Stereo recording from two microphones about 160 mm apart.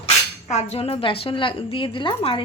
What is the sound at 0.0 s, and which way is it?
Speech, 45° left (ahead or behind).